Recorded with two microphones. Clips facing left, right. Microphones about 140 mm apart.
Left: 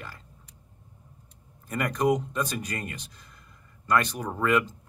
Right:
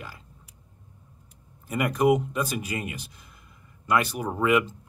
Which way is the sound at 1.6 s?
10° right (ahead or behind).